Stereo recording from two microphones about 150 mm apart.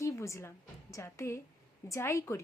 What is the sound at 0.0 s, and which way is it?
A woman's voice, 20° left (ahead or behind).